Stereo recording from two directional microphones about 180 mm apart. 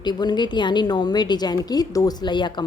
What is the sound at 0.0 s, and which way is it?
A woman's voice, 25° left (ahead or behind).